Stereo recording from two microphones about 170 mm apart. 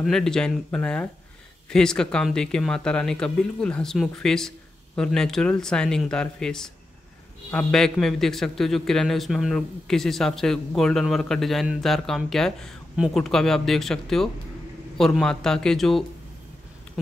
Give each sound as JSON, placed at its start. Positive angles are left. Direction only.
{"t": 0.0, "sound": "a man's voice", "side_deg": 5}